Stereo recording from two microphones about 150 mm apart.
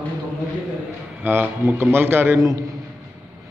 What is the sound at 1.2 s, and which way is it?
A man's voice, 15° right (ahead or behind).